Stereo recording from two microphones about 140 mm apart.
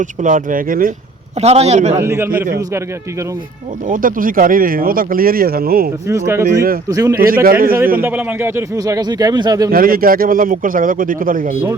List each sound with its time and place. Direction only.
0.0 s speech: 70° right (ahead or behind); by 0.9 s 85° right
1.4 s a man's voice: 50° right (ahead or behind)
2.0 s a man's voice: 20° right (ahead or behind)
3.8 s speech: 75° right (ahead or behind)
6.1 s a man's voice: 20° right (ahead or behind)
7.2 s speech: 90° right
8.0 s a man's voice: 15° right (ahead or behind); by 9.6 s 30° right (ahead or behind)
9.7 s a man's voice: 90° right